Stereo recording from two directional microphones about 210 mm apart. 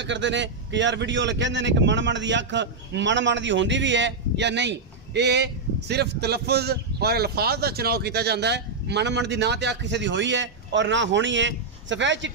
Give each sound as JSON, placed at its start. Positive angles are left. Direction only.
{"t": 0.0, "sound": "a man's voice", "side_deg": -60}